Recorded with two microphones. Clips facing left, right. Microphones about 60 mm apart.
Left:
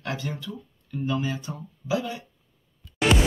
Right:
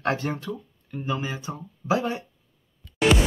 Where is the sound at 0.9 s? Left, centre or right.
Right.